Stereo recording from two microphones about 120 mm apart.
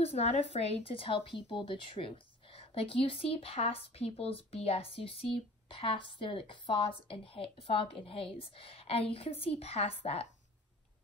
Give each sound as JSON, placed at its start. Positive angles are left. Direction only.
{"t": 0.0, "sound": "speech", "side_deg": 60}